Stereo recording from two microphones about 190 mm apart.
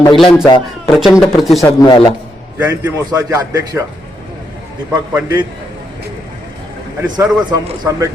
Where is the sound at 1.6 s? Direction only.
20° left (ahead or behind).